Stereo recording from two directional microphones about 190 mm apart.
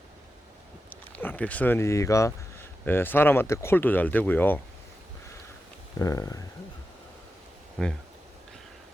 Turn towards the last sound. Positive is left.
turn(degrees=5)  # may be behind; listen again after turning